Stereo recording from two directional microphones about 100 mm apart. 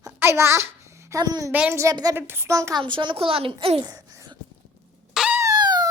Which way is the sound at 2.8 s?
55° right (ahead or behind).